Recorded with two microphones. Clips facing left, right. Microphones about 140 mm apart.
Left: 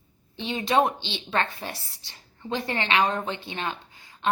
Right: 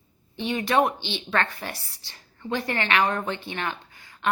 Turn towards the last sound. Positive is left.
turn(degrees=20)  # may be behind; listen again after turning